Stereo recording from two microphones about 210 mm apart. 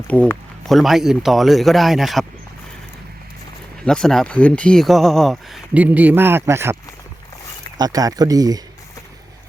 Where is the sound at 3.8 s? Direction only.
Centre (ahead or behind).